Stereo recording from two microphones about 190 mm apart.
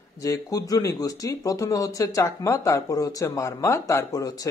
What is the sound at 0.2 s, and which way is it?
Speech, 15° left (ahead or behind).